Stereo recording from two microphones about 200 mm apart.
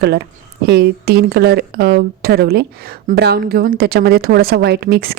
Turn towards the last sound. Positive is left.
turn(degrees=-50)  # may be behind; listen again after turning